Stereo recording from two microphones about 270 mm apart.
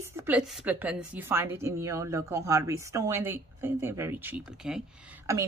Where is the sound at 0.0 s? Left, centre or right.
Centre.